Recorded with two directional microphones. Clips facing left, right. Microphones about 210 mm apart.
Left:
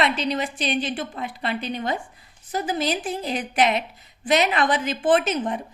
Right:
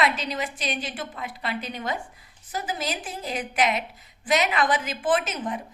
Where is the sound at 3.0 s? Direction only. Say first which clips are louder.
Left 5 dB; 30° left (ahead or behind).